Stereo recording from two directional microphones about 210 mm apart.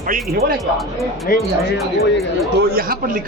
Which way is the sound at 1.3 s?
45° left (ahead or behind).